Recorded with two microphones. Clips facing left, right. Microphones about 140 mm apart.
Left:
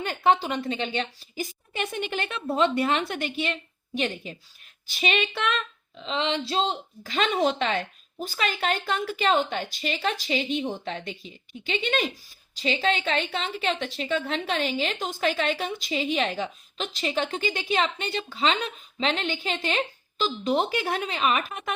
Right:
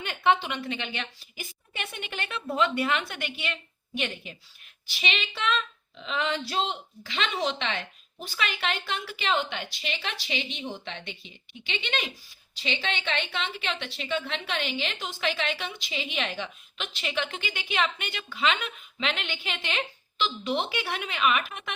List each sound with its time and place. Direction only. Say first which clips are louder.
0.0 s a woman's voice: left 2 dB; 40° left (ahead or behind); by 5.6 s 55° left (ahead or behind)
6.1 s speech: left 3 dB; 25° left (ahead or behind)
7.0 s a woman's voice: left 6 dB; 45° left (ahead or behind)